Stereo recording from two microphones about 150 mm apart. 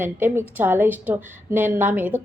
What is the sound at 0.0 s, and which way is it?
Speech, 15° right (ahead or behind).